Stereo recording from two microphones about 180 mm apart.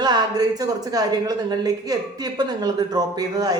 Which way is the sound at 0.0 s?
25° right (ahead or behind).